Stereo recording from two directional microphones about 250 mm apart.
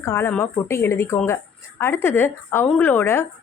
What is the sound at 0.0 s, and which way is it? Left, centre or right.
A woman's voice, centre.